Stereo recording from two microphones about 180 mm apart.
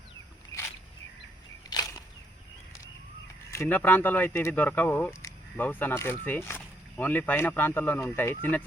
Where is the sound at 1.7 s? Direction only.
20° left (ahead or behind).